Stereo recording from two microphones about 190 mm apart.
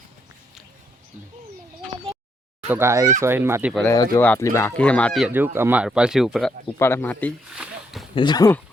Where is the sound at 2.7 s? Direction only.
15° right (ahead or behind).